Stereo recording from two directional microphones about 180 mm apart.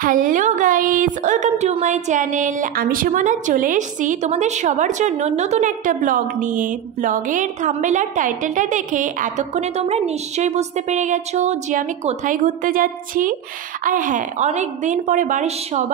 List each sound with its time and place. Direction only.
0.0 s a woman's voice: 50° right (ahead or behind)